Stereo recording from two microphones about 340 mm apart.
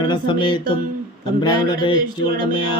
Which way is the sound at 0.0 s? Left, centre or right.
Centre.